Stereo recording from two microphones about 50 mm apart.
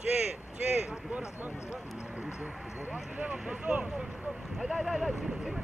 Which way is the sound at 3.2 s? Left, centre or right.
Right.